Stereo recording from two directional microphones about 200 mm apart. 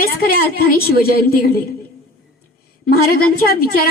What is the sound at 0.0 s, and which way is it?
A woman's voice, 50° left (ahead or behind).